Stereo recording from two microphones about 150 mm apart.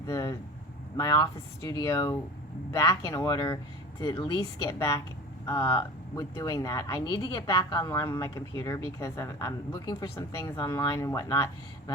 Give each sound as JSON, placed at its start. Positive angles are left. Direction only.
{"t": 0.0, "sound": "speech", "side_deg": 20}